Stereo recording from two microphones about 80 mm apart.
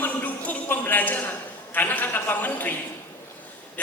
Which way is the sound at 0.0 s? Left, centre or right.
Centre.